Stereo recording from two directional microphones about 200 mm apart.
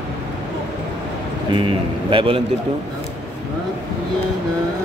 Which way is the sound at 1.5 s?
25° right (ahead or behind).